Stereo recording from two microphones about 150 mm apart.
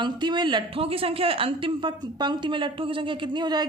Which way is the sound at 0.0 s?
30° right (ahead or behind).